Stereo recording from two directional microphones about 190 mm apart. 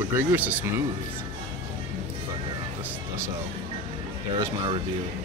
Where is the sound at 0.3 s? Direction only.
10° right (ahead or behind).